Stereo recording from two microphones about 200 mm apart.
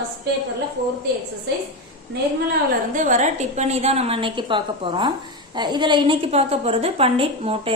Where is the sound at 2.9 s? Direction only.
40° right (ahead or behind).